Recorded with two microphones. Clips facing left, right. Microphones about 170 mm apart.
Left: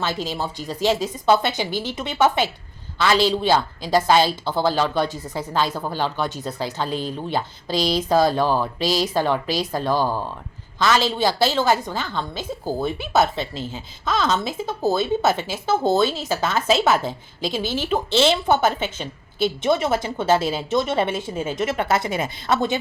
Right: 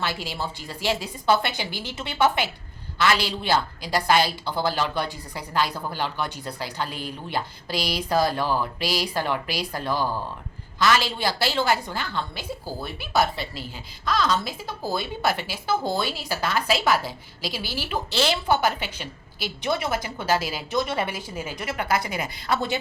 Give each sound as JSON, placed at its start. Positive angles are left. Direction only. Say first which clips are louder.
{"t": 0.1, "sound": "a woman's voice", "louder": "left 5 dB", "side_deg": 20}
{"t": 14.7, "sound": "a woman's voice", "louder": "left 9 dB", "side_deg": 20}